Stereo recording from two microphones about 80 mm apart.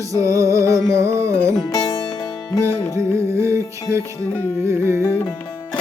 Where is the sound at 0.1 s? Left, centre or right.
Right.